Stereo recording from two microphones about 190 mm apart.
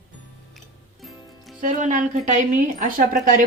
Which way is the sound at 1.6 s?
40° right (ahead or behind).